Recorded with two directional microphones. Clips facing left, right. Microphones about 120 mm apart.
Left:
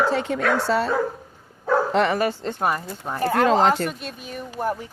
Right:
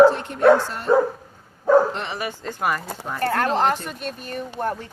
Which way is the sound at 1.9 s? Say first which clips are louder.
Left 10 dB; 60° left (ahead or behind).